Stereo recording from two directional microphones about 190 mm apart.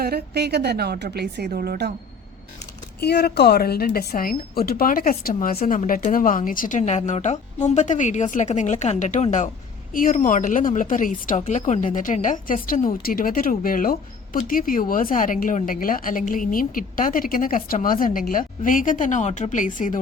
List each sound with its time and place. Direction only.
0.0 s a woman's voice: 60° right (ahead or behind)
1.5 s a woman's voice: 50° right (ahead or behind)
3.0 s a woman's voice: 60° left (ahead or behind); by 20.0 s 45° left (ahead or behind)